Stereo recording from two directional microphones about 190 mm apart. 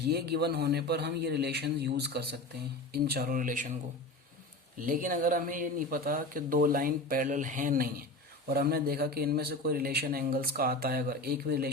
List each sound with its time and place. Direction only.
0.1 s a man's voice: 55° right (ahead or behind)
4.8 s speech: 45° right (ahead or behind)